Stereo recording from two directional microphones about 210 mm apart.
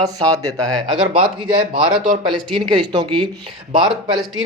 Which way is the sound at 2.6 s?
20° right (ahead or behind).